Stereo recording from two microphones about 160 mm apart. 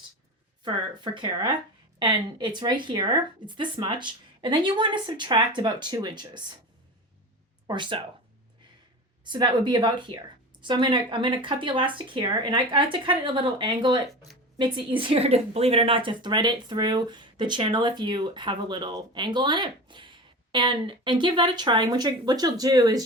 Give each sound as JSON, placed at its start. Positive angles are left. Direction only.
{"t": 0.6, "sound": "a woman's voice", "side_deg": -30}
{"t": 7.7, "sound": "a woman's voice", "side_deg": -30}
{"t": 9.3, "sound": "a woman's voice", "side_deg": -30}